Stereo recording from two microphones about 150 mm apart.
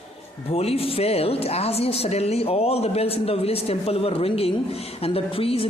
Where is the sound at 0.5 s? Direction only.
40° left (ahead or behind).